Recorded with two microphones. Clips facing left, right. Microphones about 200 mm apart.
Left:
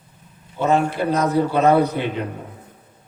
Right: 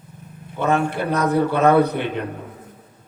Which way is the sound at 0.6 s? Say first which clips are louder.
Left 1 dB; 55° right (ahead or behind).